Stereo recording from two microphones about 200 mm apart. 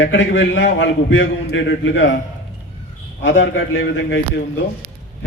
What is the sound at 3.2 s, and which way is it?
A man's voice, 70° left (ahead or behind).